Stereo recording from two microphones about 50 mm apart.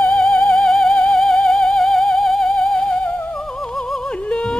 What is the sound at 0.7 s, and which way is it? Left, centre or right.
Music, centre.